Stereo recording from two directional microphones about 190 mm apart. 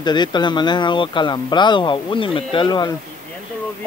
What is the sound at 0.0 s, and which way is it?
Speech, 25° left (ahead or behind).